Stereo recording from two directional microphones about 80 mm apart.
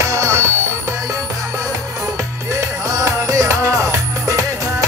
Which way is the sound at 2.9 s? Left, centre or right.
Right.